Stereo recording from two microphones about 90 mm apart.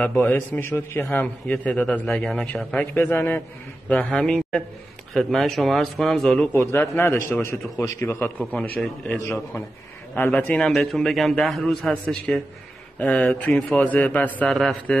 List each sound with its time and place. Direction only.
0.0 s a man's voice: 15° left (ahead or behind)
1.2 s a man's voice: 15° left (ahead or behind)
2.0 s a man's voice: 5° left (ahead or behind); by 3.4 s 20° left (ahead or behind)
4.1 s a man's voice: 10° left (ahead or behind)
6.5 s a man's voice: 25° left (ahead or behind)
8.5 s a man's voice: 10° left (ahead or behind)
10.2 s a man's voice: 20° left (ahead or behind)
10.6 s a man's voice: 5° left (ahead or behind)
13.5 s a man's voice: 5° left (ahead or behind)
13.8 s a man's voice: 20° left (ahead or behind)
14.5 s a man's voice: 5° left (ahead or behind)